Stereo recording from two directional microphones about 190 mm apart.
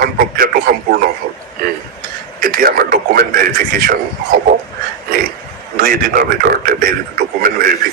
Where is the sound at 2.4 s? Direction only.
50° right (ahead or behind).